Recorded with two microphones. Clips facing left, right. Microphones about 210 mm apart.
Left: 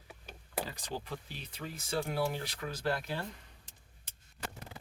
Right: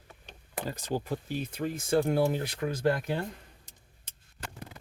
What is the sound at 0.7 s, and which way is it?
Speech, 45° right (ahead or behind).